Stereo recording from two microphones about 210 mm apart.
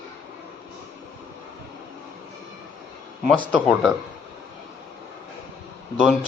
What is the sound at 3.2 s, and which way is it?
Speech, 5° right (ahead or behind).